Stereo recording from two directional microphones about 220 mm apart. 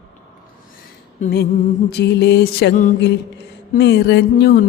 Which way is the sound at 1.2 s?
45° left (ahead or behind).